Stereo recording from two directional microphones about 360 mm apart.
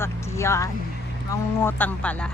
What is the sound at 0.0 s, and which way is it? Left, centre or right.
Speech, centre.